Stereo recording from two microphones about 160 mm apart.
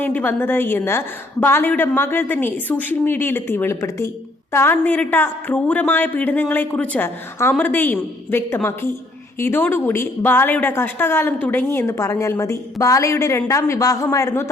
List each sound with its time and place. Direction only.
0.0 s a woman's voice: 10° left (ahead or behind)